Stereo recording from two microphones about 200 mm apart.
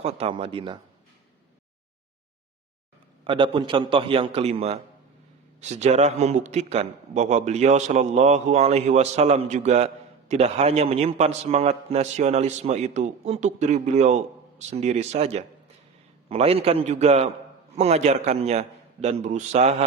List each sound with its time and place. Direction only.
0.0 s a man's voice: 30° right (ahead or behind)
3.2 s a man's voice: 25° right (ahead or behind)